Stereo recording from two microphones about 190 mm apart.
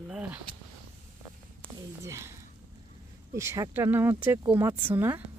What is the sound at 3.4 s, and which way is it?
Speech, 15° right (ahead or behind).